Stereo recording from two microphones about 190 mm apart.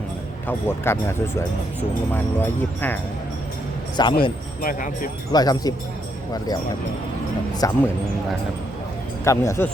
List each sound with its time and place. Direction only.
0.4 s speech: 10° left (ahead or behind)
4.0 s speech: 20° left (ahead or behind)
4.6 s speech: 50° left (ahead or behind)
5.3 s speech: 20° left (ahead or behind)
7.6 s speech: 20° left (ahead or behind)
9.2 s speech: 15° left (ahead or behind)